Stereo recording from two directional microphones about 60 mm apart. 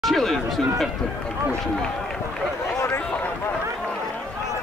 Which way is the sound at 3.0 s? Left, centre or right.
Left.